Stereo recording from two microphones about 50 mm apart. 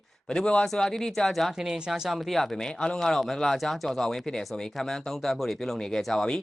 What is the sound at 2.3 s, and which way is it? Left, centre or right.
Speech, centre.